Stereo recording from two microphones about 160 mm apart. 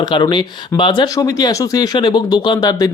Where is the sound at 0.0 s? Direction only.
30° left (ahead or behind).